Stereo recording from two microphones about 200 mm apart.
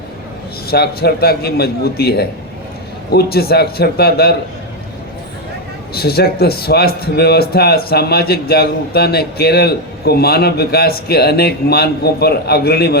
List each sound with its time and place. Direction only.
0.7 s a man's voice: 50° left (ahead or behind)
5.9 s a man's voice: 50° left (ahead or behind)